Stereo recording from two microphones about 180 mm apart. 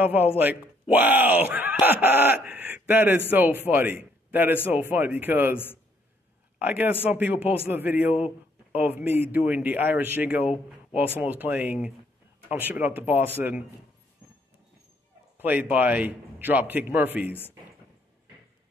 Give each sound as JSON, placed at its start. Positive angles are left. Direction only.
{"t": 0.0, "sound": "a man's voice", "side_deg": -10}
{"t": 6.6, "sound": "a man's voice", "side_deg": -10}
{"t": 15.3, "sound": "a man's voice", "side_deg": -10}